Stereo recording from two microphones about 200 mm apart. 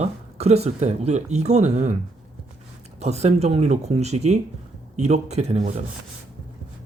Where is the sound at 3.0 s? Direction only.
35° right (ahead or behind).